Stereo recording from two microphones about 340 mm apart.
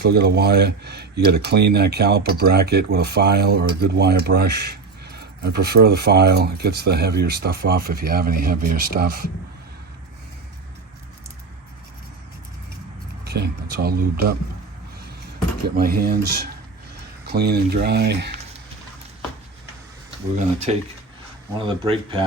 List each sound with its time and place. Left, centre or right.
0.0 s speech: right
13.2 s speech: right
15.6 s speech: right
20.7 s speech: centre